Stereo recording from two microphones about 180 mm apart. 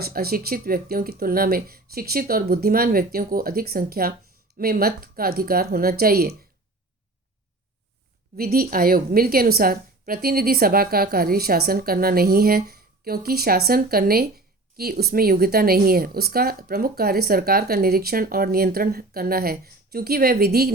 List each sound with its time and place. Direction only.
0.0 s a woman's voice: 60° right (ahead or behind)
8.4 s a woman's voice: 55° right (ahead or behind)